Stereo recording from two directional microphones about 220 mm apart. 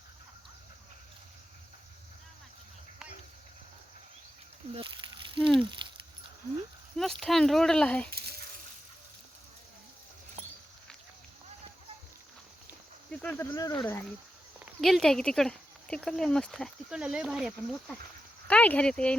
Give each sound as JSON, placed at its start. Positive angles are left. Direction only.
{"t": 4.7, "sound": "a sound", "side_deg": -20}
{"t": 6.9, "sound": "speech", "side_deg": 0}
{"t": 13.1, "sound": "speech", "side_deg": 5}
{"t": 14.6, "sound": "speech", "side_deg": 0}